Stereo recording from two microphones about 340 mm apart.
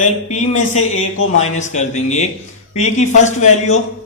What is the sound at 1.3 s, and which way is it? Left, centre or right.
A man's voice, centre.